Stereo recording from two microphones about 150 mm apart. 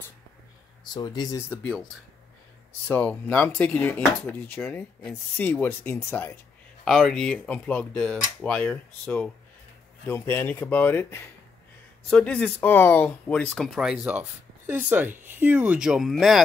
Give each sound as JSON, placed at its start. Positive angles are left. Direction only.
{"t": 0.9, "sound": "speech", "side_deg": 25}
{"t": 2.9, "sound": "speech", "side_deg": 10}
{"t": 6.8, "sound": "speech", "side_deg": 5}
{"t": 14.7, "sound": "speech", "side_deg": -10}